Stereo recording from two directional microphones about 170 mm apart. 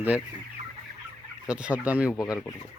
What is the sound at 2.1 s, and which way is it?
Speech, 20° left (ahead or behind).